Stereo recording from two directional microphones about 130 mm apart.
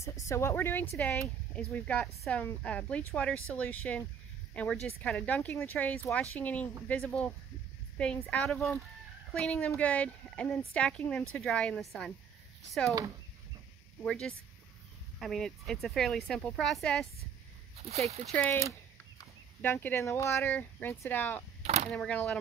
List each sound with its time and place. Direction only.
0.0 s a woman's voice: 25° left (ahead or behind); by 12.1 s centre (ahead or behind)
14.0 s speech: 5° left (ahead or behind)
17.7 s speech: 55° right (ahead or behind)
19.6 s speech: 15° left (ahead or behind)